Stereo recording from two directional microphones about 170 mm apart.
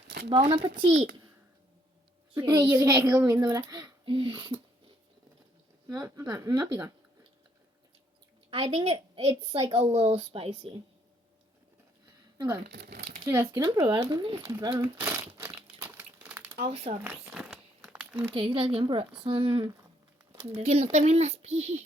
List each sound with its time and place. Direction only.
0.3 s speech: 30° right (ahead or behind)
2.3 s a child's voice: 15° right (ahead or behind); by 4.5 s 30° right (ahead or behind)
5.9 s speech: 20° right (ahead or behind)
8.4 s a woman's voice: 35° right (ahead or behind)
12.6 s speech: 75° right (ahead or behind)
13.2 s a child's voice: 15° right (ahead or behind)
15.0 s crumpling: 15° right (ahead or behind)
16.6 s speech: 35° right (ahead or behind)
17.0 s crumpling: 10° right (ahead or behind)
18.3 s speech: 30° right (ahead or behind)